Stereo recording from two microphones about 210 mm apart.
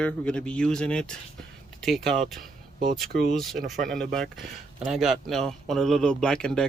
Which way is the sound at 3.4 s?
Centre (ahead or behind).